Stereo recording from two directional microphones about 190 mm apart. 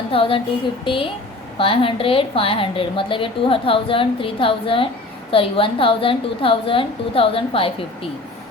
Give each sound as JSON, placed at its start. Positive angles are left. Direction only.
{"t": 0.1, "sound": "a woman's voice", "side_deg": 30}